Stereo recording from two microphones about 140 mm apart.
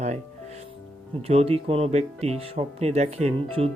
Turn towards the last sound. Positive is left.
turn(degrees=-45)  # may be behind; listen again after turning